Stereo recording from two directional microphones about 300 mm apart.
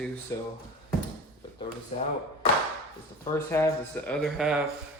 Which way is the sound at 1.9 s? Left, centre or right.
Left.